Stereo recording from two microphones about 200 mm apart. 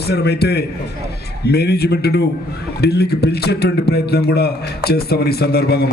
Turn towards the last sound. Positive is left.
turn(degrees=50)  # may be behind; listen again after turning